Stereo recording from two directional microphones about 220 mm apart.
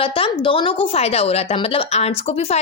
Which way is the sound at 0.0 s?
25° left (ahead or behind).